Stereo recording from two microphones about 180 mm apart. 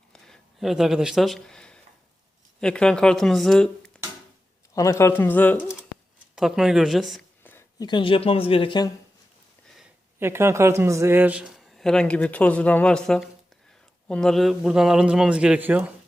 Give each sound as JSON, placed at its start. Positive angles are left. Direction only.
{"t": 0.1, "sound": "a sound", "side_deg": 0}
{"t": 2.6, "sound": "a man's voice", "side_deg": 5}
{"t": 4.7, "sound": "speech", "side_deg": 15}
{"t": 6.3, "sound": "a man's voice", "side_deg": 0}
{"t": 7.4, "sound": "a sound", "side_deg": 10}
{"t": 7.9, "sound": "speech", "side_deg": 25}
{"t": 10.2, "sound": "a man's voice", "side_deg": -15}